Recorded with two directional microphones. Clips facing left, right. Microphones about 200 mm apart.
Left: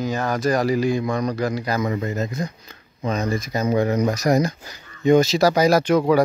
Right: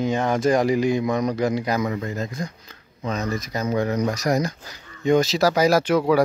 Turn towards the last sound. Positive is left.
turn(degrees=-5)  # may be behind; listen again after turning